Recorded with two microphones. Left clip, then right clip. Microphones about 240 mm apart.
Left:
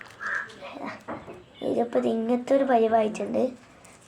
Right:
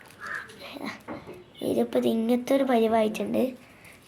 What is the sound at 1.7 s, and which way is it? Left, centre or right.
A woman's voice, right.